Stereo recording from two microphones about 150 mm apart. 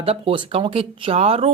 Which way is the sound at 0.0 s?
40° right (ahead or behind).